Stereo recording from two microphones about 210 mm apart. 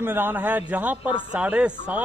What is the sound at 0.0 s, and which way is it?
A man's voice, 10° right (ahead or behind).